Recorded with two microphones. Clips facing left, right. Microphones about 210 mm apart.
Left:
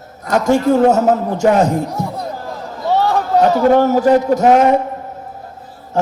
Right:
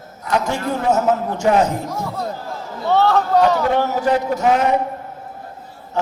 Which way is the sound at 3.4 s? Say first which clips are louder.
Left 8 dB; 45° left (ahead or behind).